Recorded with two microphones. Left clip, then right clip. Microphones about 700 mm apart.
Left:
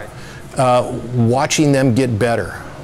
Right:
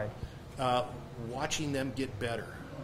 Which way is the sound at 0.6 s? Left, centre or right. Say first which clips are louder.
Left 17 dB; left.